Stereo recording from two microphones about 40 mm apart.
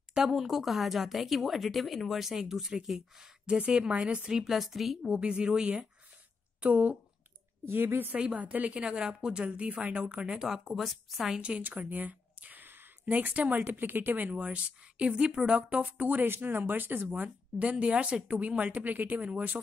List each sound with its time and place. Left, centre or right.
0.2 s speech: centre
3.4 s speech: right
4.5 s speech: centre
5.2 s speech: right
6.6 s speech: right
7.6 s a woman's voice: right
8.4 s speech: right
8.7 s speech: right; by 11.3 s centre
11.3 s speech: right
11.9 s speech: right
14.4 s speech: right
15.5 s speech: right
16.3 s speech: right